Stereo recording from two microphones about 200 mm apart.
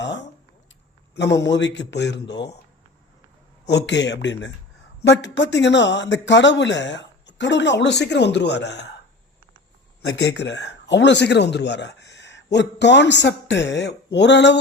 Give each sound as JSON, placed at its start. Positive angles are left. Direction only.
{"t": 0.0, "sound": "a sound", "side_deg": 60}
{"t": 1.1, "sound": "a man's voice", "side_deg": 60}
{"t": 3.7, "sound": "a man's voice", "side_deg": 60}
{"t": 10.2, "sound": "a man's voice", "side_deg": 60}